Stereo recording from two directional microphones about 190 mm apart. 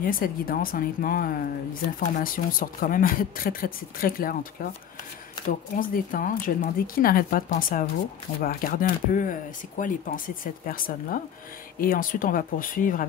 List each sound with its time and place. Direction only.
0.0 s speech: 50° left (ahead or behind)